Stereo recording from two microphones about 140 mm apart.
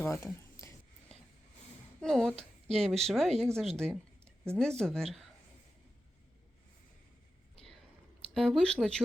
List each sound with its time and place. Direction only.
0.0 s speech: 15° left (ahead or behind)
2.0 s a woman's voice: 5° left (ahead or behind)
8.3 s a woman's voice: 5° left (ahead or behind)